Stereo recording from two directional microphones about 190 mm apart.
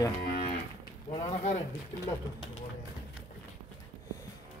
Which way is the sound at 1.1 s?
35° left (ahead or behind).